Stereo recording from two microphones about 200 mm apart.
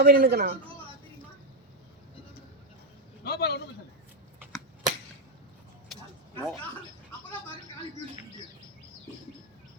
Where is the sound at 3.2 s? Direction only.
55° left (ahead or behind).